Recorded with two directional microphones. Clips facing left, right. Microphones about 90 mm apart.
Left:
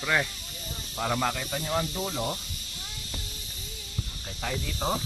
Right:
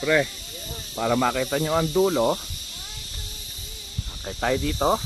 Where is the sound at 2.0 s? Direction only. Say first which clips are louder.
Right 11 dB; 85° right.